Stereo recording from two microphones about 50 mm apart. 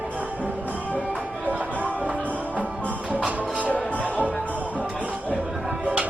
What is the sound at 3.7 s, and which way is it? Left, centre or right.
Music, left.